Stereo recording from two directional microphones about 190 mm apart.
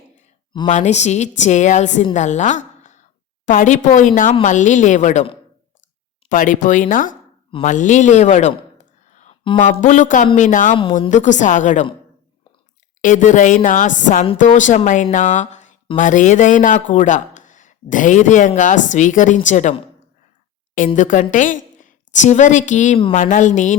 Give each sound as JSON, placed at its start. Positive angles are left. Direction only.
{"t": 0.7, "sound": "a woman's voice", "side_deg": 35}
{"t": 6.2, "sound": "speech", "side_deg": 45}
{"t": 9.5, "sound": "a woman's voice", "side_deg": 25}
{"t": 9.8, "sound": "speech", "side_deg": 40}
{"t": 10.8, "sound": "a woman's voice", "side_deg": 25}
{"t": 11.1, "sound": "speech", "side_deg": 40}
{"t": 13.0, "sound": "speech", "side_deg": 40}
{"t": 20.7, "sound": "a woman's voice", "side_deg": 40}